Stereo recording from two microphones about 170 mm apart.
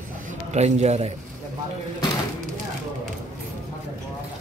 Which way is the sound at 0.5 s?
40° right (ahead or behind).